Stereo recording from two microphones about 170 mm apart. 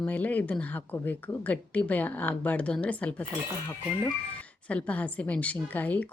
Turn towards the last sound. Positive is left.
turn(degrees=10)  # may be behind; listen again after turning